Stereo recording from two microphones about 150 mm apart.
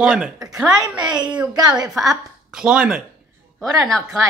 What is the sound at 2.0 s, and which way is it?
Speech, 5° right (ahead or behind).